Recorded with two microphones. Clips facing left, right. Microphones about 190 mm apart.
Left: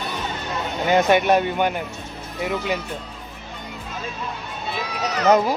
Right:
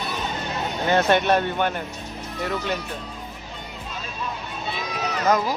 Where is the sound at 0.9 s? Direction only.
15° left (ahead or behind).